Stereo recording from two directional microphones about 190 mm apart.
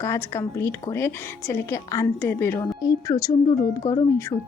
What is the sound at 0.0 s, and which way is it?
Speech, 15° left (ahead or behind).